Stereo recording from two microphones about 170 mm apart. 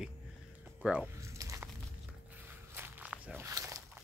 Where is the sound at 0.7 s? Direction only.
5° right (ahead or behind).